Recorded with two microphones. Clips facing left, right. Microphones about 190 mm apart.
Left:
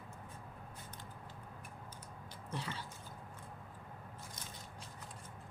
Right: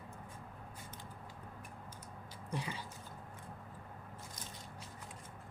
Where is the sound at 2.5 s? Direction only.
15° right (ahead or behind).